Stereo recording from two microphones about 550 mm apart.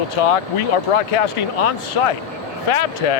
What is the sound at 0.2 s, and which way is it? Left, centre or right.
Speech, left.